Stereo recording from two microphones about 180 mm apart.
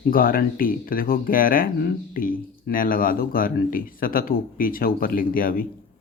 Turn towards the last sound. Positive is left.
turn(degrees=50)  # may be behind; listen again after turning